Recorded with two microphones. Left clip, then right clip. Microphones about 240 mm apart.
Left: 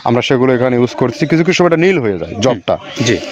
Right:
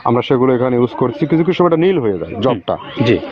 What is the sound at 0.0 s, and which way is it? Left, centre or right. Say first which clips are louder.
Speech: left 1 dB; left.